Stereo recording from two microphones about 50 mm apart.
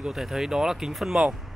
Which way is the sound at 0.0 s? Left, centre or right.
Centre.